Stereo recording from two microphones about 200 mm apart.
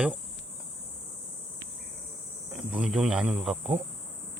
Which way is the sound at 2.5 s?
5° right (ahead or behind).